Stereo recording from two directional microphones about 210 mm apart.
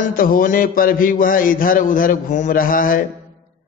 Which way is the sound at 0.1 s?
40° left (ahead or behind).